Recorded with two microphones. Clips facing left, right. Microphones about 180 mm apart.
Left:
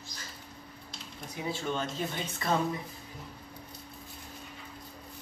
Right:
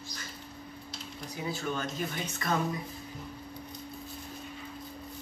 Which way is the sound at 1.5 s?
25° left (ahead or behind).